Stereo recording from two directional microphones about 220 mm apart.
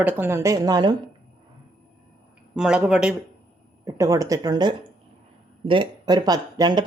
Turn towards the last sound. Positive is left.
turn(degrees=-15)  # may be behind; listen again after turning